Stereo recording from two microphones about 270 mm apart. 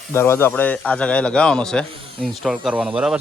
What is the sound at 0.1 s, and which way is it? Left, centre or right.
A man's voice, centre.